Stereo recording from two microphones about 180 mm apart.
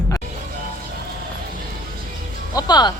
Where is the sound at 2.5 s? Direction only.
25° left (ahead or behind).